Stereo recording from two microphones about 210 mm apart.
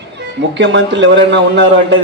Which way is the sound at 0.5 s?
55° right (ahead or behind).